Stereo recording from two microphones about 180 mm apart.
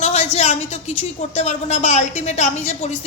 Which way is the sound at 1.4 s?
40° left (ahead or behind).